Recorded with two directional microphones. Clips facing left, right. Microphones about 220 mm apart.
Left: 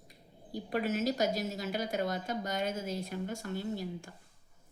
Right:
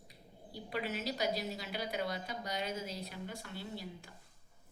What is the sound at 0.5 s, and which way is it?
A woman's voice, 45° left (ahead or behind).